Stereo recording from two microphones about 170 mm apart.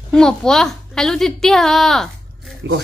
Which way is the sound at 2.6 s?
90° right.